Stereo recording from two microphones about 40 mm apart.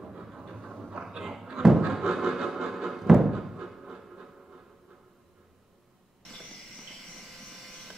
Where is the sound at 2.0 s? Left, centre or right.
Centre.